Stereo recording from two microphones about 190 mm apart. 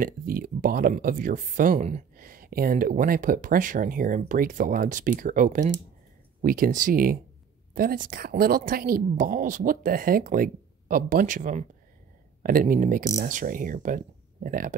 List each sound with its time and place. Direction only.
0.0 s speech: 50° right (ahead or behind)